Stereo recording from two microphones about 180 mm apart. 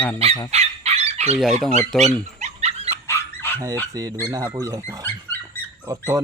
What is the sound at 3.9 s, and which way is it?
Speech, 20° right (ahead or behind).